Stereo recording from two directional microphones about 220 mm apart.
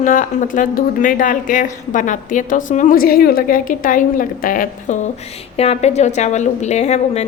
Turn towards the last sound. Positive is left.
turn(degrees=30)  # may be behind; listen again after turning